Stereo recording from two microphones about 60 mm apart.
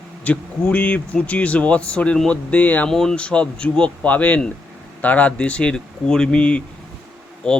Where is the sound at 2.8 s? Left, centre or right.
Centre.